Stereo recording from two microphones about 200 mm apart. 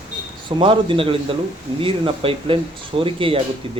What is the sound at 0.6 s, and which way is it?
Speech, 25° right (ahead or behind).